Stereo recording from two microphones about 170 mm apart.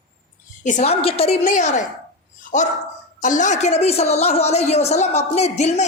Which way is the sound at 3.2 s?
50° left (ahead or behind).